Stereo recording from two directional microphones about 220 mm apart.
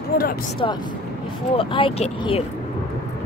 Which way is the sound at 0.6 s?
25° left (ahead or behind).